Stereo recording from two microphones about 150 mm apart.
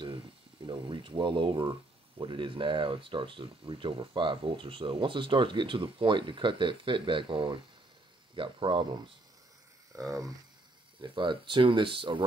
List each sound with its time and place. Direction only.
0.7 s speech: 30° right (ahead or behind)
9.9 s speech: 25° right (ahead or behind)